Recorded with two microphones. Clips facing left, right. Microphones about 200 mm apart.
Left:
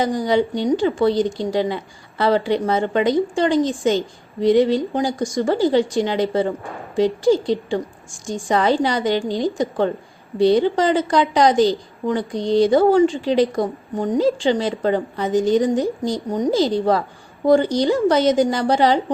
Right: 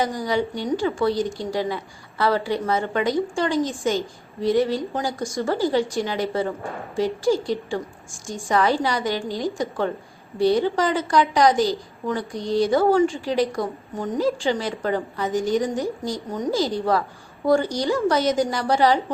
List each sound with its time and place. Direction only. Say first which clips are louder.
0.0 s a woman's voice: left 5 dB; 25° left (ahead or behind)